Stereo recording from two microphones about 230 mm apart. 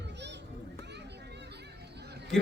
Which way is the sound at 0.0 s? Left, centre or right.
Right.